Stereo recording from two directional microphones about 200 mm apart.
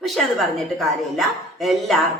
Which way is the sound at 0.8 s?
Centre (ahead or behind).